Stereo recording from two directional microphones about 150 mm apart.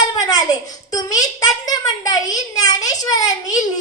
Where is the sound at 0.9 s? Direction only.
25° left (ahead or behind).